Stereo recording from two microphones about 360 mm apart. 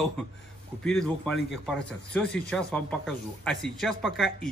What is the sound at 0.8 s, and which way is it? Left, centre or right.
Speech, centre.